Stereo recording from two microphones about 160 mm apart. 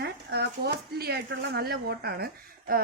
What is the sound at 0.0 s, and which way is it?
Speech, 85° right.